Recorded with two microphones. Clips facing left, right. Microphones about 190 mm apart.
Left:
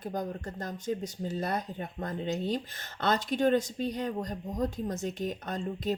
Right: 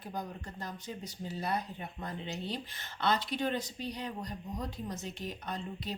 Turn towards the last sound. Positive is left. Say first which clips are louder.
# left 7 dB
turn(degrees=45)  # may be behind; listen again after turning